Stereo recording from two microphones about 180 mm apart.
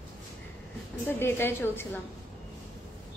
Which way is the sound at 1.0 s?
10° left (ahead or behind).